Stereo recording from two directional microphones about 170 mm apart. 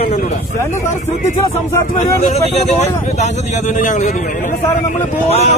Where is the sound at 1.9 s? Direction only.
40° left (ahead or behind).